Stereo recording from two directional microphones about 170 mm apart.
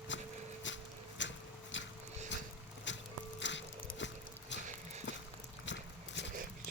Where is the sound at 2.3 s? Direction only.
90° left.